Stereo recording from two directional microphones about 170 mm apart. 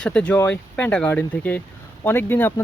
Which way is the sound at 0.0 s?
5° left (ahead or behind).